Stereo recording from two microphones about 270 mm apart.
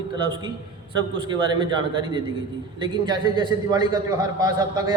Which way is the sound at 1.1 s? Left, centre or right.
Centre.